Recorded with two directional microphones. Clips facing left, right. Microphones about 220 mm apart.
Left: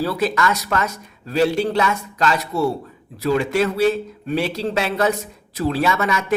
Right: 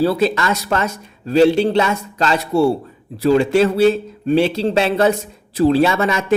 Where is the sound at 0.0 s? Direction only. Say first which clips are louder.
Right 4 dB; 25° right (ahead or behind).